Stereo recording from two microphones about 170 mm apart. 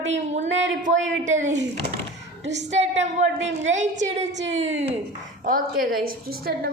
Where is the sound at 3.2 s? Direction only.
90° right.